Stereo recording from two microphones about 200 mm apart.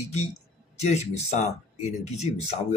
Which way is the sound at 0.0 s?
35° left (ahead or behind).